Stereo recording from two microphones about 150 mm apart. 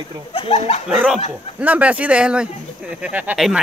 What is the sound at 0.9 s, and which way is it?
Speech, 5° right (ahead or behind).